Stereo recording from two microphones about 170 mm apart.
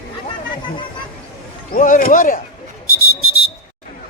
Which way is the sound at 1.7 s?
50° left (ahead or behind).